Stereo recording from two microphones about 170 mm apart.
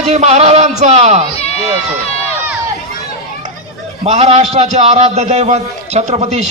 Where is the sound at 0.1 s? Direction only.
40° right (ahead or behind).